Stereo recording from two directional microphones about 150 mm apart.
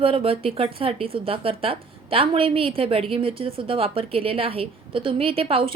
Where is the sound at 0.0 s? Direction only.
35° right (ahead or behind).